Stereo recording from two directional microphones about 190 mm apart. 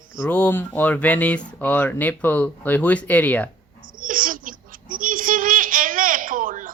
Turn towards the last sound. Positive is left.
turn(degrees=-45)  # may be behind; listen again after turning